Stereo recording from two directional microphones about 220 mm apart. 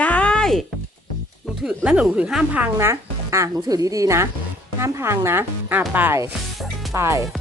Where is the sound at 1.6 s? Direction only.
5° right (ahead or behind).